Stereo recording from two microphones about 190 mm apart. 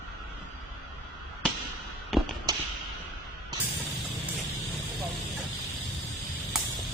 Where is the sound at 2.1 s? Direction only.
Centre (ahead or behind).